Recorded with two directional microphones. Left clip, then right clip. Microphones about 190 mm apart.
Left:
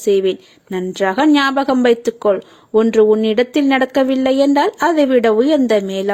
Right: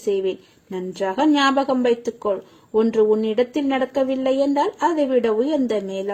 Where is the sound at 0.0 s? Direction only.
20° left (ahead or behind).